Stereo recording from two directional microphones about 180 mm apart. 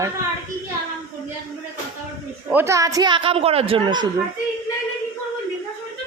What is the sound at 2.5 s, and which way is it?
A woman's voice, 15° right (ahead or behind).